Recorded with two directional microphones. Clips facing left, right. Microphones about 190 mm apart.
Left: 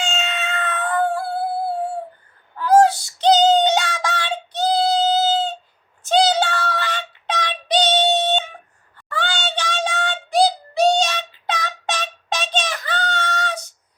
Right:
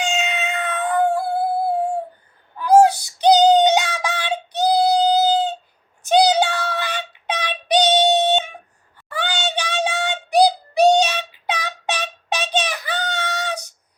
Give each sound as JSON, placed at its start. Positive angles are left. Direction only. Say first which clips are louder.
{"t": 0.0, "sound": "cat", "louder": "right 2 dB", "side_deg": -10}
{"t": 2.6, "sound": "synthetic singing", "louder": "right 1 dB", "side_deg": -10}
{"t": 6.1, "sound": "a sound", "louder": "right 2 dB", "side_deg": -10}